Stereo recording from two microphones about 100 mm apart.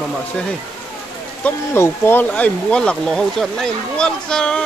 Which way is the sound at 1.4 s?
20° left (ahead or behind).